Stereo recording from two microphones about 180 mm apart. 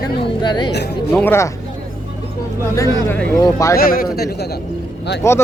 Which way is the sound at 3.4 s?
20° left (ahead or behind).